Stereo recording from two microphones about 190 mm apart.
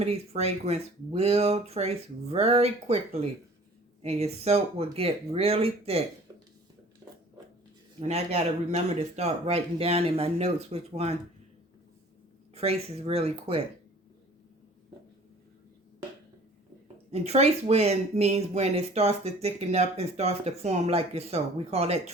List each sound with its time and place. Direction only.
0.0 s speech: 35° right (ahead or behind)
8.0 s speech: 35° right (ahead or behind)
12.5 s speech: 30° right (ahead or behind)
17.1 s speech: 35° right (ahead or behind)